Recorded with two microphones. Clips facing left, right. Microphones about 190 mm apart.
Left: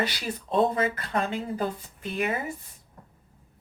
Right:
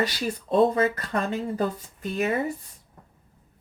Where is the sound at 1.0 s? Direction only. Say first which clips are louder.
Right 1 dB; 40° right (ahead or behind).